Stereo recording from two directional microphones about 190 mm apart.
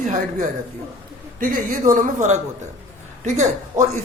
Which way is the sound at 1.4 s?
45° right (ahead or behind).